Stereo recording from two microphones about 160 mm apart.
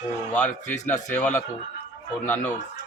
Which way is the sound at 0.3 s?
10° left (ahead or behind).